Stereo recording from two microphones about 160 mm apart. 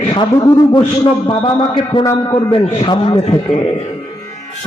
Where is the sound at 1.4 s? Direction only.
30° left (ahead or behind).